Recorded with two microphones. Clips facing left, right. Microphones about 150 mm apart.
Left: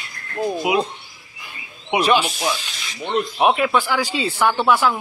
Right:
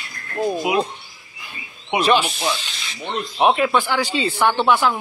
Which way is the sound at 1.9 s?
5° left (ahead or behind).